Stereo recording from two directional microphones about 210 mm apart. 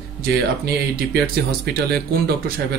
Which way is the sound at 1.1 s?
50° right (ahead or behind).